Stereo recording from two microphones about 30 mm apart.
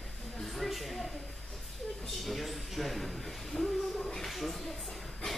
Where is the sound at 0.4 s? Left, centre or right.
Centre.